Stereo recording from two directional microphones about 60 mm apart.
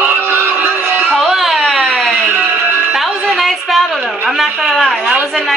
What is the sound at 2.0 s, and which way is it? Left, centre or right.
Music, right.